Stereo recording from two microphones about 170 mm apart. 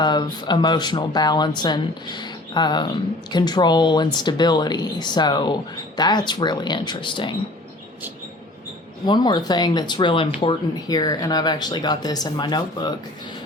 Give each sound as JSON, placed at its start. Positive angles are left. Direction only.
{"t": 0.0, "sound": "speech", "side_deg": 25}
{"t": 9.0, "sound": "speech", "side_deg": 25}